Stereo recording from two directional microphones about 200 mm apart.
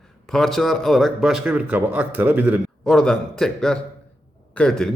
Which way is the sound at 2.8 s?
5° left (ahead or behind).